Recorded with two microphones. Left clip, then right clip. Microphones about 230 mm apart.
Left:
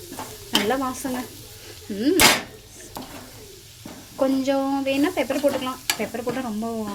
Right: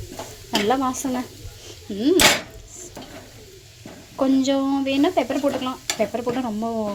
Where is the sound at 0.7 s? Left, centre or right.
Centre.